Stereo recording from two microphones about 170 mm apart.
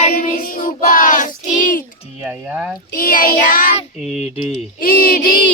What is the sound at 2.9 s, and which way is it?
Child singing, 55° left (ahead or behind).